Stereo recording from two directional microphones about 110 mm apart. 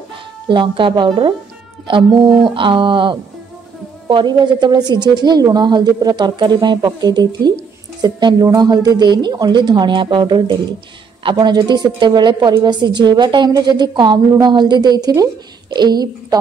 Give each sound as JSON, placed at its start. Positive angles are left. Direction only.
{"t": 0.5, "sound": "a woman's voice", "side_deg": -50}